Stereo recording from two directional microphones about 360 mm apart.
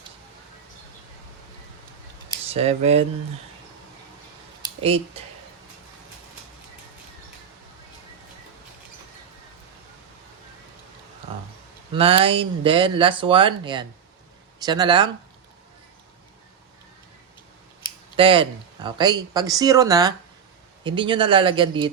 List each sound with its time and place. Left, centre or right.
2.5 s speech: centre
5.2 s speech: centre
11.9 s speech: centre
18.2 s speech: centre